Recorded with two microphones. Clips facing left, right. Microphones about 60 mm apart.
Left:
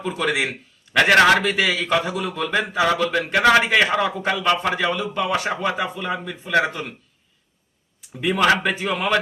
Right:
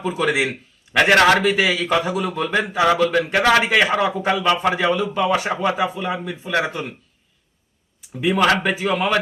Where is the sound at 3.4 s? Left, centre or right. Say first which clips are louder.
Left 1 dB; centre.